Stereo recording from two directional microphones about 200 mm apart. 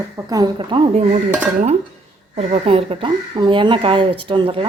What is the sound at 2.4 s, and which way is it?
Speech, 30° right (ahead or behind).